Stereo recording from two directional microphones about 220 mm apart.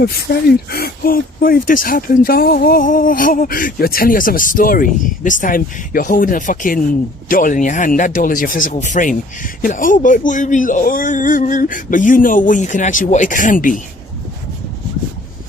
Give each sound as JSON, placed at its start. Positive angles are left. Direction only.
{"t": 0.0, "sound": "speech", "side_deg": 45}